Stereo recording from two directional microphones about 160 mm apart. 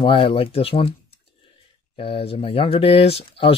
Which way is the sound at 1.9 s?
35° left (ahead or behind).